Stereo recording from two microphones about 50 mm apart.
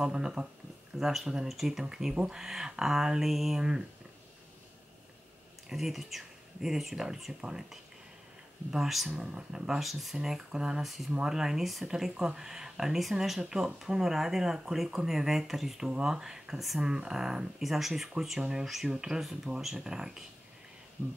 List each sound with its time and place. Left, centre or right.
0.0 s speech: centre
5.7 s speech: centre
9.2 s speech: centre